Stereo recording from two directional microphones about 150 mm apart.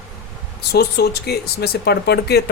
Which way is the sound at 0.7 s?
90° left.